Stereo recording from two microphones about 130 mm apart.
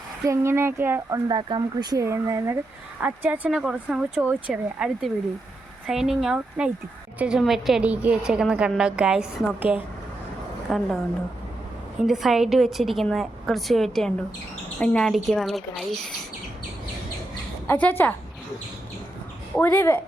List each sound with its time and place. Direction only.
0.3 s speech: 20° right (ahead or behind)
1.3 s a woman's voice: 35° right (ahead or behind); by 10.8 s 5° right (ahead or behind)
11.9 s a woman's voice: 5° right (ahead or behind)
17.7 s a woman's voice: 15° left (ahead or behind)
19.5 s a woman's voice: 15° left (ahead or behind)